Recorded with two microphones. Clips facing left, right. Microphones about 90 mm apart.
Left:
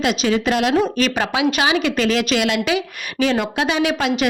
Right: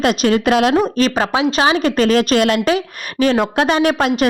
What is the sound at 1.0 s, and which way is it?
A woman's voice, 35° right (ahead or behind).